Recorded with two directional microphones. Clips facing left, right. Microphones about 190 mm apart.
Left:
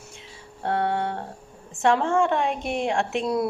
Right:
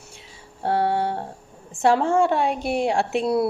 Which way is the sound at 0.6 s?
30° right (ahead or behind).